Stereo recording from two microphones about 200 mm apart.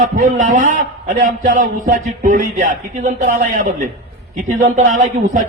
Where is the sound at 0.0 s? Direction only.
40° right (ahead or behind).